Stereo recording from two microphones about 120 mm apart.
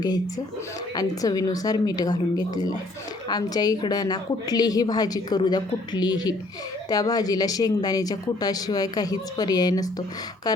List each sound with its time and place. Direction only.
0.0 s a woman's voice: 35° left (ahead or behind)